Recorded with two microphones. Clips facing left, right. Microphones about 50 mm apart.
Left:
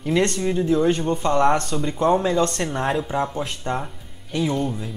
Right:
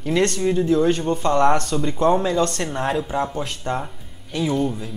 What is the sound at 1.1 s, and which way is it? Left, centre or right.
Speech, centre.